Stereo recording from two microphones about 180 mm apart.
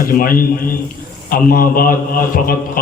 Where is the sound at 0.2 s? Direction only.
50° left (ahead or behind).